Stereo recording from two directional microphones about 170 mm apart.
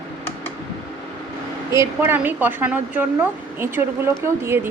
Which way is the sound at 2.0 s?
10° right (ahead or behind).